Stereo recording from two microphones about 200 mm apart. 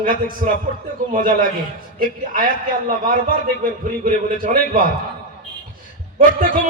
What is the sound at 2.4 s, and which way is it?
A man's voice, 45° right (ahead or behind).